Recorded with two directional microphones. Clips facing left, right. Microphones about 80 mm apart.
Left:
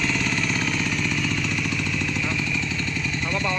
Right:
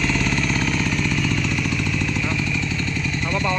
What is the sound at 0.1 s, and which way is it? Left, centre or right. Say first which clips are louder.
Vehicle: right 3 dB; right.